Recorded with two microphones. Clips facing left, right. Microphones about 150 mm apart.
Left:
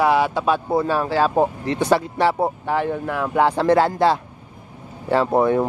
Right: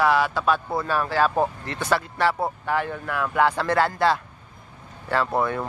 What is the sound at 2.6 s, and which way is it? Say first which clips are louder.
A man's voice: left 4 dB; 20° left (ahead or behind).